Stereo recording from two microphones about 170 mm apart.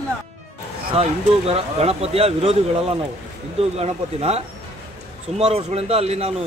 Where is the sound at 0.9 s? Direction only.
35° right (ahead or behind).